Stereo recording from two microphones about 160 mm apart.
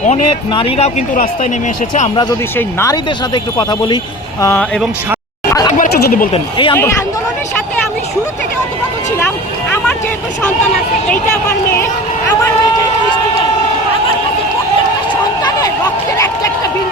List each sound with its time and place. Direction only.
0.5 s speech: 35° left (ahead or behind)
2.6 s speech: 15° left (ahead or behind)
6.3 s speech: 30° left (ahead or behind)
16.1 s a sound: 20° left (ahead or behind)